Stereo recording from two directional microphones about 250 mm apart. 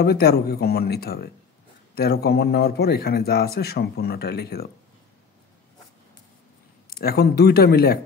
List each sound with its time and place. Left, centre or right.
0.0 s speech: left
6.9 s speech: left